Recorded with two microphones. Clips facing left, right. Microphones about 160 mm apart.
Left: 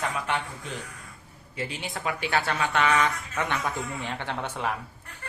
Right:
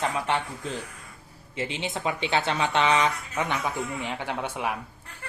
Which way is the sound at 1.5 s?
25° right (ahead or behind).